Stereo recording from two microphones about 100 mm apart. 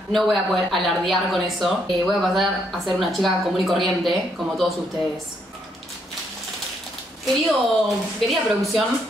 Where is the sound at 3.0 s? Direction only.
Centre (ahead or behind).